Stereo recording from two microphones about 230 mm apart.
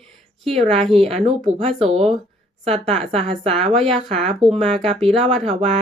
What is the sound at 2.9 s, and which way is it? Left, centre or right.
A woman's voice, right.